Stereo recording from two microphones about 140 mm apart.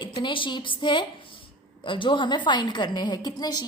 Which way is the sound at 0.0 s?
35° left (ahead or behind).